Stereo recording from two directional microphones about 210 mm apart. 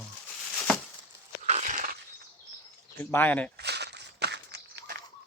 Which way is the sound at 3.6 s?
55° right (ahead or behind).